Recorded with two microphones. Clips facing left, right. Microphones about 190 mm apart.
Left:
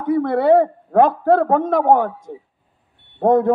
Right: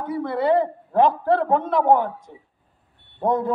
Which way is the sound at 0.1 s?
60° left (ahead or behind).